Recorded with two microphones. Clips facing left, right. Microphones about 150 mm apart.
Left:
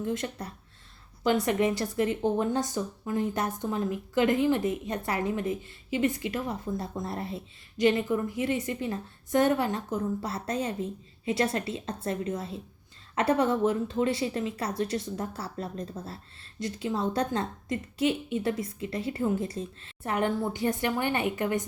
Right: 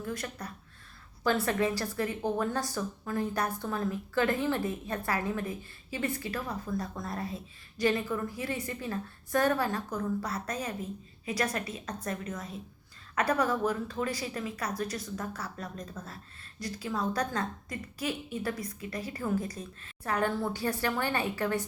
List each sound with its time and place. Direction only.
0.0 s a woman's voice: 25° left (ahead or behind)